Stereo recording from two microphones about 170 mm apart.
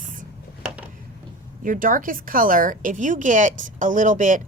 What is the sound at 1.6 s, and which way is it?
A woman's voice, 50° right (ahead or behind).